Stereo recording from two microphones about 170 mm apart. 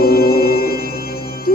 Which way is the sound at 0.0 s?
60° left (ahead or behind).